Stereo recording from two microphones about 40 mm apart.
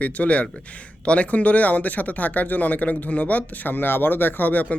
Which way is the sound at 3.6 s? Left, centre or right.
Left.